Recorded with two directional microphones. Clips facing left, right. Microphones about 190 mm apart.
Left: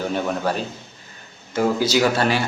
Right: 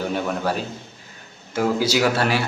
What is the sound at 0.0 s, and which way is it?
A man's voice, 5° right (ahead or behind).